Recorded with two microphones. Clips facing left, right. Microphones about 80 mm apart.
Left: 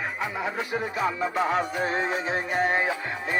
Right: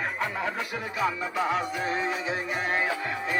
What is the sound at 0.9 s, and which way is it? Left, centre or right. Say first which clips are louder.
Music: left 1 dB; left.